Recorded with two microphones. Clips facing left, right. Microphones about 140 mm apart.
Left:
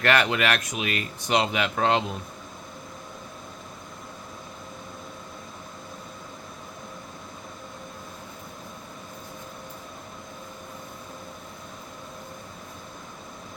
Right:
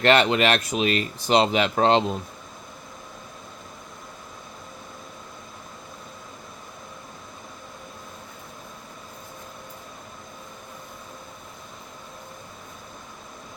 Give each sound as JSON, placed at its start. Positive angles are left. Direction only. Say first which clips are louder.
{"t": 0.0, "sound": "speech", "louder": "right 4 dB", "side_deg": -25}